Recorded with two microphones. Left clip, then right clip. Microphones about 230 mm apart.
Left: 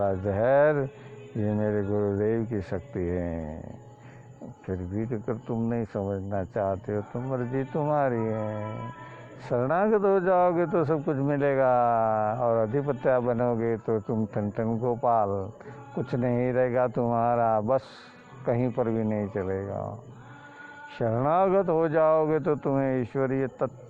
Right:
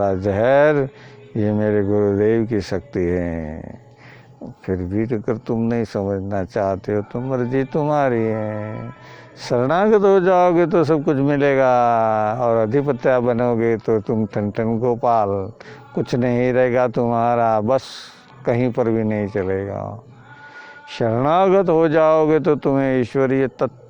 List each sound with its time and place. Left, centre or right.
0.0 s a man's voice: right
4.6 s a man's voice: right
20.9 s a man's voice: right